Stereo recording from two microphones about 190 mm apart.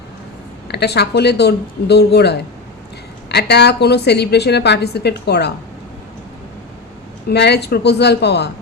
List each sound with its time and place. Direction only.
0.7 s a woman's voice: 60° left (ahead or behind)
7.3 s a woman's voice: 60° left (ahead or behind)